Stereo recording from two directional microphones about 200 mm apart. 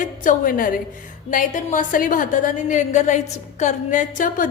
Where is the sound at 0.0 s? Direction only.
40° left (ahead or behind).